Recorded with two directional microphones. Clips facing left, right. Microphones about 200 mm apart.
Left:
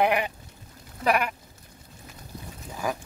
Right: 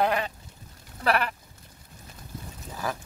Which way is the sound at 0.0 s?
20° left (ahead or behind).